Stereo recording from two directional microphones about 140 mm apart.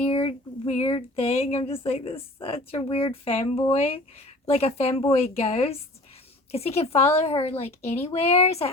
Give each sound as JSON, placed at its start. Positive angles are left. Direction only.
{"t": 0.0, "sound": "speech", "side_deg": 45}